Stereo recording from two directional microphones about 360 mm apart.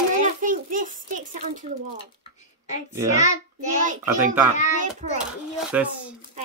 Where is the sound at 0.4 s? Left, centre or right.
Right.